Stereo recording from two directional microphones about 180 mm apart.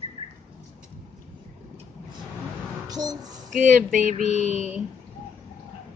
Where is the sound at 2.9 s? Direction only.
20° right (ahead or behind).